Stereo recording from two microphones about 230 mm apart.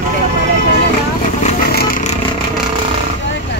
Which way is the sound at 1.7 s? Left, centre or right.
Left.